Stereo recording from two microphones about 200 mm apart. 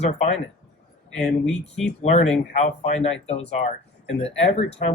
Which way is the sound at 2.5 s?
35° left (ahead or behind).